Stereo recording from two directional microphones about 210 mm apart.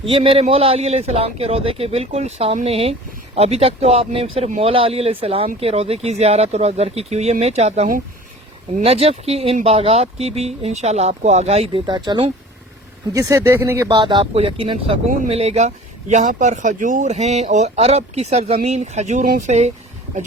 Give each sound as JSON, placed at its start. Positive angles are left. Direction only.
{"t": 0.0, "sound": "speech", "side_deg": -25}
{"t": 13.8, "sound": "speech", "side_deg": -20}